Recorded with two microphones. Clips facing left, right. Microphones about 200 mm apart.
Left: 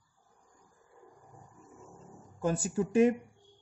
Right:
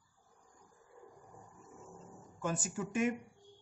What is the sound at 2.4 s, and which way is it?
Speech, 35° left (ahead or behind).